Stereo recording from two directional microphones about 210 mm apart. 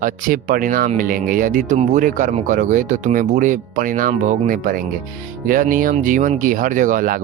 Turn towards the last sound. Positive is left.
turn(degrees=-40)  # may be behind; listen again after turning